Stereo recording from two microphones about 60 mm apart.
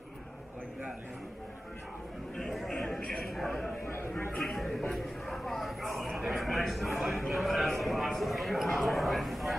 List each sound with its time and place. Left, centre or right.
2.3 s a man's voice: centre
3.8 s chatter: left
4.4 s speech: centre